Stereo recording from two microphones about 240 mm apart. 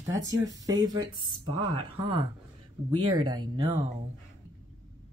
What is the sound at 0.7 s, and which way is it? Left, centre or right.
Speech, centre.